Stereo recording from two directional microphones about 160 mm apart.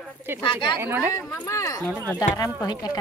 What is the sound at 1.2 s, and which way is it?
Speech, 5° left (ahead or behind).